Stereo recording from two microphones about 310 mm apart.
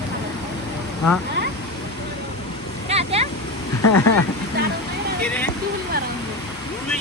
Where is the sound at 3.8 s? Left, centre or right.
Left.